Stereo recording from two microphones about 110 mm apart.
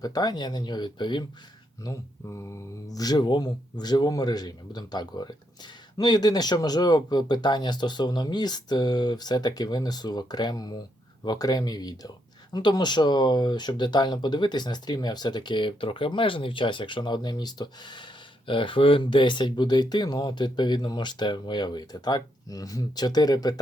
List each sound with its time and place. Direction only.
0.0 s speech: 35° left (ahead or behind)
1.8 s speech: 30° left (ahead or behind)